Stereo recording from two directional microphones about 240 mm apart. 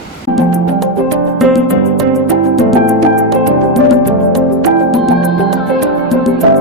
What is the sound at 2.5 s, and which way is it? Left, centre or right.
Music, centre.